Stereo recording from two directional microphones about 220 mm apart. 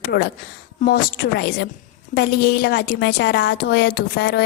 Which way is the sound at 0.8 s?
45° left (ahead or behind).